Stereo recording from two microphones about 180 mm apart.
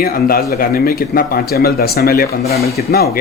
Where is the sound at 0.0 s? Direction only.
55° left (ahead or behind).